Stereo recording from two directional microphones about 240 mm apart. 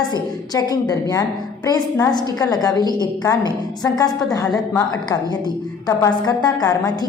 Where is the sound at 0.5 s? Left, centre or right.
Centre.